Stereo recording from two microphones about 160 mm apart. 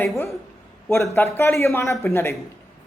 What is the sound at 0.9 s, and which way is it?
A man's voice, 15° left (ahead or behind).